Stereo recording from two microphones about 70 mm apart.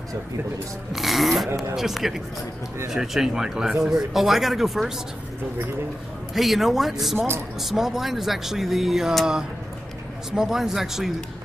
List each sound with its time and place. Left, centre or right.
0.9 s speech: centre
6.3 s speech: centre
7.2 s speech: right
7.6 s speech: centre